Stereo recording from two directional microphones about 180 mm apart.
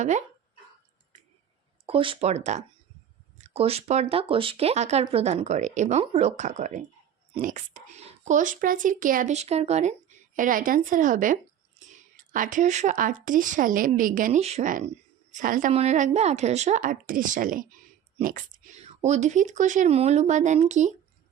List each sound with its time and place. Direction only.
0.0 s speech: 40° right (ahead or behind)
1.9 s a woman's voice: 30° right (ahead or behind); by 11.3 s 45° right (ahead or behind)
11.8 s whispering: 45° right (ahead or behind)
12.1 s a woman's voice: 45° right (ahead or behind)